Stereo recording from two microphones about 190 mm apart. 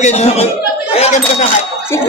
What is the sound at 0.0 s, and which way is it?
Speech, 35° left (ahead or behind).